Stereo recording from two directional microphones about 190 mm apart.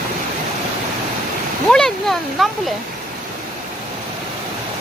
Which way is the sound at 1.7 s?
5° left (ahead or behind).